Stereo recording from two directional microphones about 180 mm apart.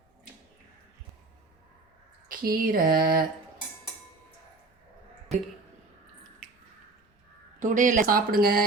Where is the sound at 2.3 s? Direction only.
55° right (ahead or behind).